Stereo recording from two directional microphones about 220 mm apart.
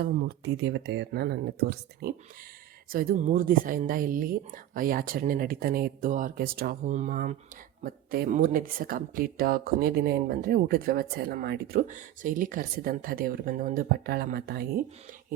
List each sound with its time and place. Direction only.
0.0 s speech: 50° right (ahead or behind)